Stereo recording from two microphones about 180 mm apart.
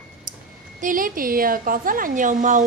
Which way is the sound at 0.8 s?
50° right (ahead or behind).